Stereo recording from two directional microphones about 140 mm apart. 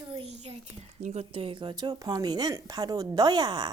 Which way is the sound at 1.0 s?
50° right (ahead or behind).